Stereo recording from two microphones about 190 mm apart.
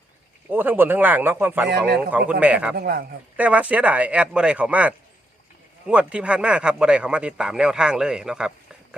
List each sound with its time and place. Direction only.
0.5 s speech: 10° right (ahead or behind)
2.7 s a man's voice: 55° right (ahead or behind)
3.3 s a man's voice: 5° right (ahead or behind)